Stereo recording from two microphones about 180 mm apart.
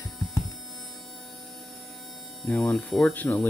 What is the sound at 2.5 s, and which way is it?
Speech, 5° left (ahead or behind).